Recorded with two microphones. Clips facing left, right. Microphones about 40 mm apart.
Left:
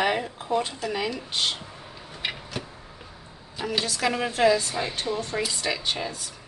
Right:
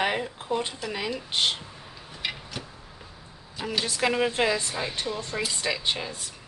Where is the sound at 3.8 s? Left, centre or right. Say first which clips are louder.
Right 4 dB; right.